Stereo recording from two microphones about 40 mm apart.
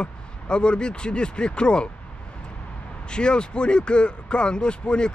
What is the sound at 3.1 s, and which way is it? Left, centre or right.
Speech, left.